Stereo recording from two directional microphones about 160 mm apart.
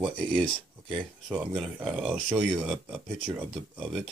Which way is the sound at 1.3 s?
5° right (ahead or behind).